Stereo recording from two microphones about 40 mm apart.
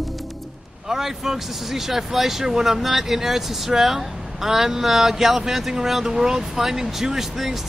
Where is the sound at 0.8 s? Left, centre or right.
Centre.